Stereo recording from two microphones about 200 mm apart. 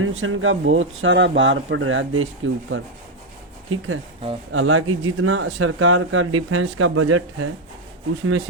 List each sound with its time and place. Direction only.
0.0 s speech: 85° right
3.7 s speech: 90° right